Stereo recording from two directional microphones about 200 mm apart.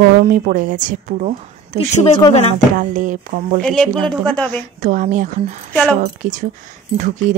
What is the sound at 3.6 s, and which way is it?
A woman's voice, centre (ahead or behind).